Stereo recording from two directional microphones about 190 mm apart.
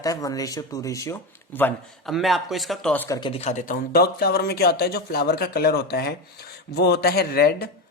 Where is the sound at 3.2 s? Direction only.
30° left (ahead or behind); by 7.7 s 55° left (ahead or behind).